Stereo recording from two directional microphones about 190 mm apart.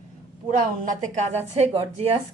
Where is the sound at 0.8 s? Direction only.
35° right (ahead or behind).